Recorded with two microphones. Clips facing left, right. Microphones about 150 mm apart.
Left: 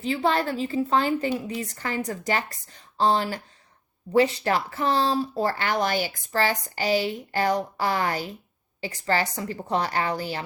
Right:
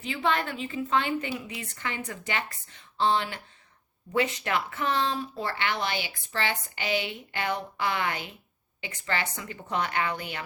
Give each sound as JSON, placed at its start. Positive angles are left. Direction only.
{"t": 0.0, "sound": "speech", "side_deg": 35}